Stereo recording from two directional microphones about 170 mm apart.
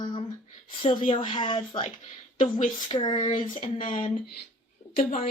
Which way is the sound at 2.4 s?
45° left (ahead or behind).